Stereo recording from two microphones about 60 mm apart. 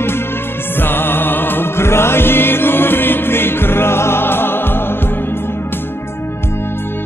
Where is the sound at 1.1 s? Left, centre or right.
Left.